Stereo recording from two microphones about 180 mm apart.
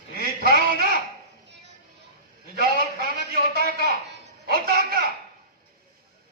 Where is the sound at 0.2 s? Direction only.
55° right (ahead or behind).